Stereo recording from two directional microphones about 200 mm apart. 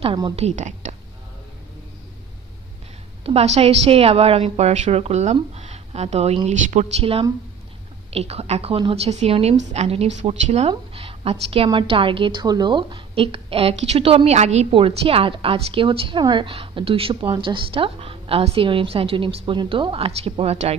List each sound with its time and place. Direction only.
0.0 s a woman's voice: 25° right (ahead or behind)
3.3 s a woman's voice: 30° right (ahead or behind)
10.7 s a sound: 30° right (ahead or behind)
11.5 s a woman's voice: 25° right (ahead or behind)